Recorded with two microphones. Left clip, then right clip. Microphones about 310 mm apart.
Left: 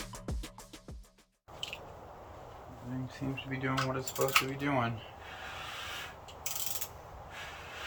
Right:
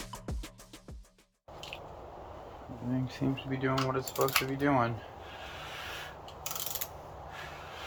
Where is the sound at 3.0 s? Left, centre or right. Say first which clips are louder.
Right 5 dB; right.